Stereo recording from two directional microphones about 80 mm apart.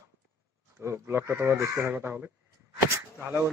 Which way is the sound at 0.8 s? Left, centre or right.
Right.